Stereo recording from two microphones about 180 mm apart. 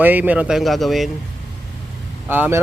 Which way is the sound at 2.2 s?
10° right (ahead or behind).